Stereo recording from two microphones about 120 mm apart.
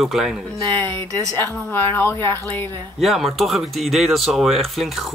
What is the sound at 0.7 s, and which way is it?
Speech, 20° left (ahead or behind).